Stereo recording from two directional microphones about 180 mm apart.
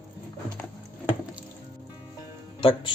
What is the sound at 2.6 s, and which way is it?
Speech, 30° left (ahead or behind).